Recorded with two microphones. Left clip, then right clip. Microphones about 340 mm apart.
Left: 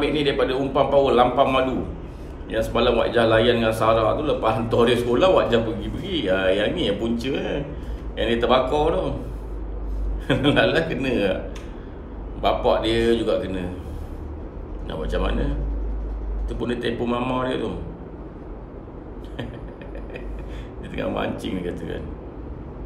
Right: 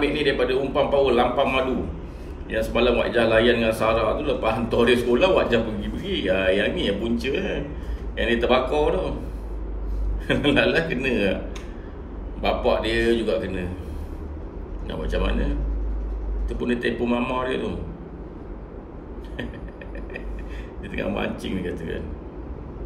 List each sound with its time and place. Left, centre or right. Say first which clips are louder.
0.0 s a man's voice: left 1 dB; centre
10.2 s a man's voice: left 1 dB; centre
12.4 s a man's voice: left 2 dB; centre
14.9 s a man's voice: left 1 dB; centre
20.9 s a man's voice: left 1 dB; centre